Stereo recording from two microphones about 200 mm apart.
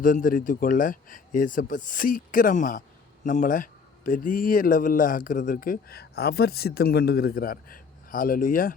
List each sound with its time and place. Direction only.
0.0 s speech: 40° left (ahead or behind)